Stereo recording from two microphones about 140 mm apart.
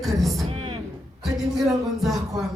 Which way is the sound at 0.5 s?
40° right (ahead or behind).